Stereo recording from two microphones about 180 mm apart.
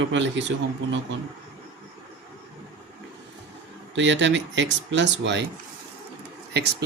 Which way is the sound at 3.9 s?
90° right.